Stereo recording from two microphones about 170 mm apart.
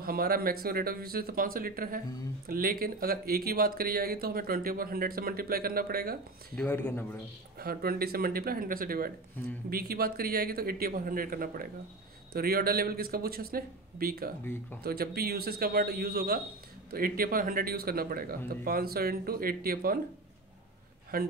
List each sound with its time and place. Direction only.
0.0 s speech: 60° right (ahead or behind)
6.5 s speech: 10° left (ahead or behind)
7.5 s speech: 60° right (ahead or behind)
14.4 s speech: 10° left (ahead or behind)
14.8 s speech: 65° right (ahead or behind)
21.1 s speech: 60° right (ahead or behind)